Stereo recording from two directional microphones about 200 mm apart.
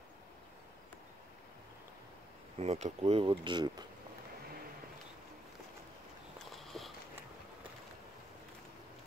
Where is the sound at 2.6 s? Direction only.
30° right (ahead or behind).